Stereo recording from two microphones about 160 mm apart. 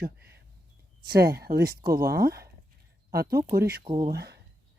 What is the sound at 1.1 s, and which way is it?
Speech, 85° right.